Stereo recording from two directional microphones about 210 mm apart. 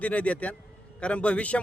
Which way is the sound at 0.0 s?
5° left (ahead or behind).